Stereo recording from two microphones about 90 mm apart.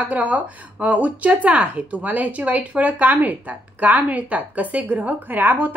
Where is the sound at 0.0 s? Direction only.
15° right (ahead or behind).